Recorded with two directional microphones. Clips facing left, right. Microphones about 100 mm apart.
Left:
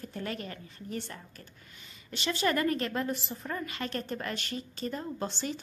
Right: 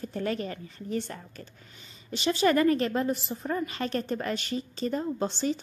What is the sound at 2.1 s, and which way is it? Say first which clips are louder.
Speech: right 6 dB; 20° right (ahead or behind).